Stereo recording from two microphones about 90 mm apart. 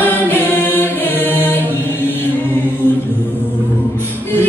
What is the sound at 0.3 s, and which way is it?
Music, 20° left (ahead or behind).